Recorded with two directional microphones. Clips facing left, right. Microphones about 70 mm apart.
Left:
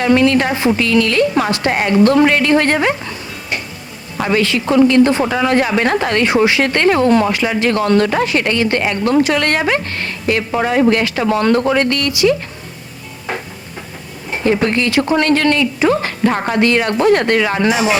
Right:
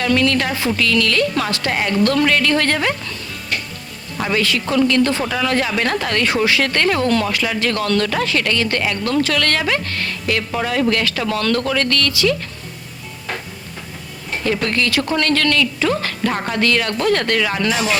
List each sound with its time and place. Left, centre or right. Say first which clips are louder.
0.0 s speech: left 5 dB; left
14.4 s speech: left 5 dB; left